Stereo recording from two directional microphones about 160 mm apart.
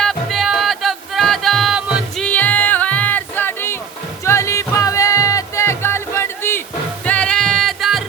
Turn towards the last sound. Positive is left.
turn(degrees=0)  # may be behind; listen again after turning